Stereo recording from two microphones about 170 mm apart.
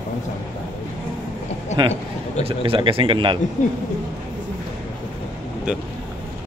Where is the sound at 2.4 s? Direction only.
30° right (ahead or behind).